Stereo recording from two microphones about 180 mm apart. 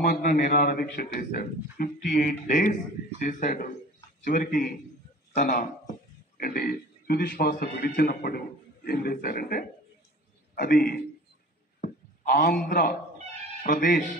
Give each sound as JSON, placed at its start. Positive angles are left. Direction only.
{"t": 0.0, "sound": "a man's voice", "side_deg": 50}
{"t": 11.8, "sound": "livestock", "side_deg": 50}
{"t": 12.6, "sound": "a man's voice", "side_deg": 50}